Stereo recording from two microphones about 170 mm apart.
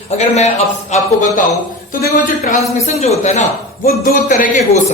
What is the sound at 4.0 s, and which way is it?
Speech, 55° left (ahead or behind).